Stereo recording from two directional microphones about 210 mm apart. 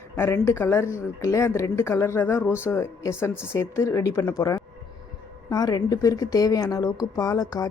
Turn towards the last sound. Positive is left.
turn(degrees=15)  # may be behind; listen again after turning